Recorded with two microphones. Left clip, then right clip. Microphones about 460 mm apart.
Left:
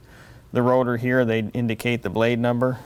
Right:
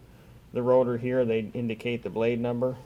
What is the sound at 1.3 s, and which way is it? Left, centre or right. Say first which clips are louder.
Speech: left 4 dB; left.